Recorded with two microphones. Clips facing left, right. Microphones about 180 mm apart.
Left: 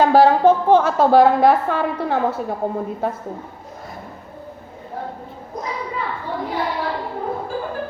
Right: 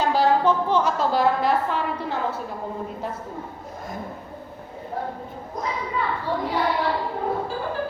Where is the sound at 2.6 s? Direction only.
55° left (ahead or behind).